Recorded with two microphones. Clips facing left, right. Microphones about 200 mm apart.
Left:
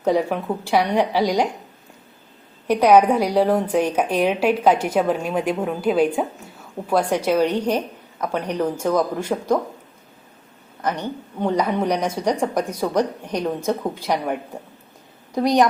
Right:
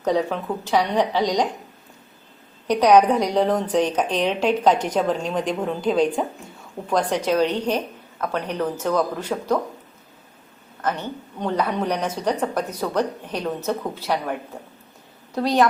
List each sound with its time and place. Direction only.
0.0 s a woman's voice: 10° left (ahead or behind)
2.6 s a woman's voice: 10° left (ahead or behind)
10.8 s a woman's voice: 15° left (ahead or behind)
15.4 s a woman's voice: 15° left (ahead or behind)